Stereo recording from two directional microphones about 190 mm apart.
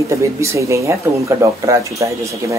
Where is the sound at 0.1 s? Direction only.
15° right (ahead or behind).